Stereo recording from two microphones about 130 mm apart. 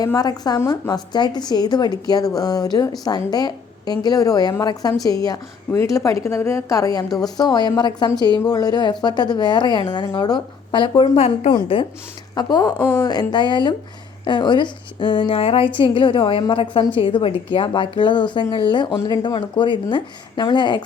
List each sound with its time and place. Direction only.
0.0 s a woman's voice: 30° left (ahead or behind)
12.4 s a woman's voice: 30° left (ahead or behind)